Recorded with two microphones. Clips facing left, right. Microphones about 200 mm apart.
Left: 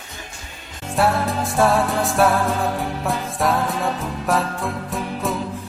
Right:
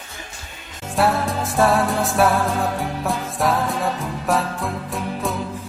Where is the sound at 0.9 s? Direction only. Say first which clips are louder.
Even; centre (ahead or behind).